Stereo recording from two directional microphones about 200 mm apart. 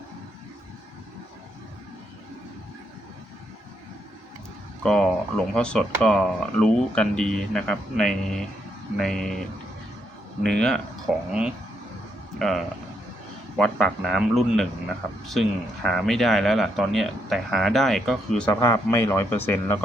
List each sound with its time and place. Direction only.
4.8 s speech: 5° left (ahead or behind)
18.6 s speech: 15° left (ahead or behind)